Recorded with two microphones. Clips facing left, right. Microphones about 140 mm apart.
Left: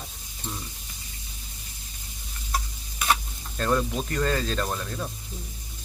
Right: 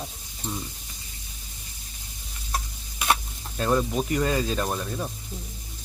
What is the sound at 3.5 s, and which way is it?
Speech, 10° right (ahead or behind).